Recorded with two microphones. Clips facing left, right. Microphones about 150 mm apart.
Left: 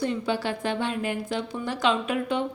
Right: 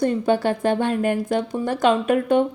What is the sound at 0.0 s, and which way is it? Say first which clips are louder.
A woman's voice: right 7 dB; 50° right (ahead or behind).